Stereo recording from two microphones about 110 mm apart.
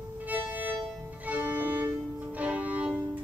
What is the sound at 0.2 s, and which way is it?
Music, 15° right (ahead or behind).